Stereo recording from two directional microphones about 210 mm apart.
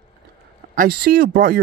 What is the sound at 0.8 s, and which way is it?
Speech, 45° right (ahead or behind).